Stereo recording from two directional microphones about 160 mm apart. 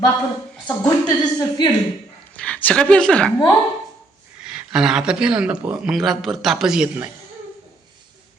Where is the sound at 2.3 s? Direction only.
5° left (ahead or behind).